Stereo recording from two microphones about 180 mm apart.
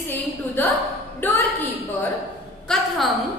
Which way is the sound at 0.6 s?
10° left (ahead or behind).